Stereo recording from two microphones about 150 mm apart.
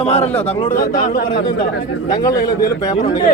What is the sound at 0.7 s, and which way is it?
Speech, 70° left (ahead or behind).